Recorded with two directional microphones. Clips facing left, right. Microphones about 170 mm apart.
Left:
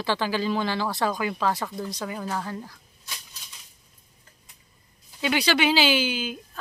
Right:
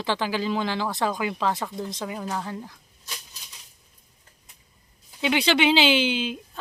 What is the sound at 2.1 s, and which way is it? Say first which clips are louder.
Speech: even; 5° right (ahead or behind).